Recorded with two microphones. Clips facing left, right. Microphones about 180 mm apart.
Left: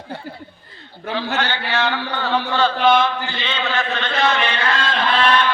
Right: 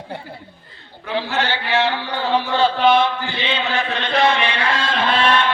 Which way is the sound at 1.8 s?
30° right (ahead or behind).